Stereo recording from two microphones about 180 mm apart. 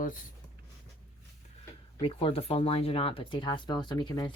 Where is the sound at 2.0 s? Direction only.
35° left (ahead or behind).